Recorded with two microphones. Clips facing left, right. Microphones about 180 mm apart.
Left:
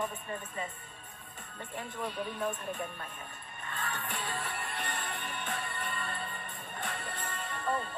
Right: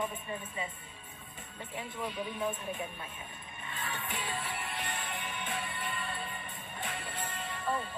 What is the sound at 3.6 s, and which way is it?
Music, 55° left (ahead or behind).